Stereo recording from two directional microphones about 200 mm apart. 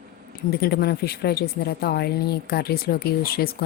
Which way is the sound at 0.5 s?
50° left (ahead or behind).